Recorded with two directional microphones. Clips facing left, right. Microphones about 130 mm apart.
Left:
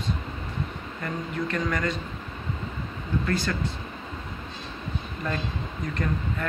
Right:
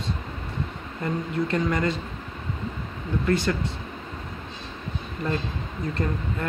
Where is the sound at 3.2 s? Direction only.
25° right (ahead or behind).